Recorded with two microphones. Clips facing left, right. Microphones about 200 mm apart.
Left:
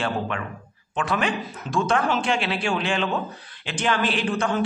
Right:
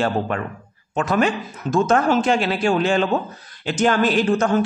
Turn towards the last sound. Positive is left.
turn(degrees=-45)  # may be behind; listen again after turning